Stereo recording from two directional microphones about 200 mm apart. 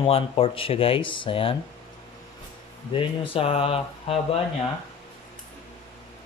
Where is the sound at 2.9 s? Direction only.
25° left (ahead or behind).